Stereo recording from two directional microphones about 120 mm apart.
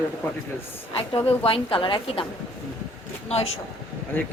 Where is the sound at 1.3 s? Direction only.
50° left (ahead or behind).